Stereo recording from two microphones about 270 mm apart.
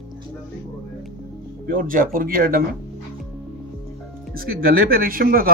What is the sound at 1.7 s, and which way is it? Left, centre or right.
Speech, right.